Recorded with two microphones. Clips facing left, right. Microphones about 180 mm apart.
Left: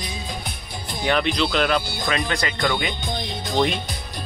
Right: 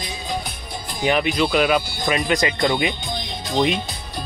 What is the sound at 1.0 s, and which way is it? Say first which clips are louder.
Speech: right 2 dB; 15° right (ahead or behind).